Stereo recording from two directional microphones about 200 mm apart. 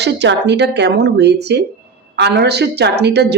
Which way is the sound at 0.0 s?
60° right (ahead or behind).